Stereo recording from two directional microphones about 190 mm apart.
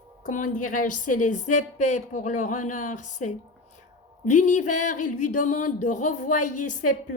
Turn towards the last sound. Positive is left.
turn(degrees=40)  # may be behind; listen again after turning